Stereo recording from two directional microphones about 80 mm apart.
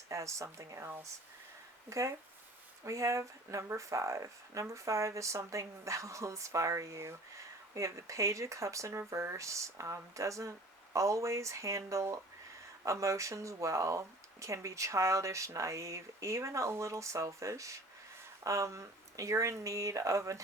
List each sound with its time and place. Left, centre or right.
0.1 s speech: right